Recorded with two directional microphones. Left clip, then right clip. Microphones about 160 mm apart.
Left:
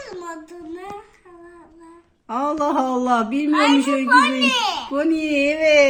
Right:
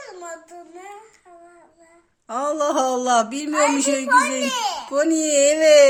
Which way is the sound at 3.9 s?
20° right (ahead or behind).